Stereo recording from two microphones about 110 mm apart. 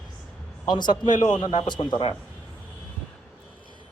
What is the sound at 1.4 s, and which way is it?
Speech, 55° left (ahead or behind).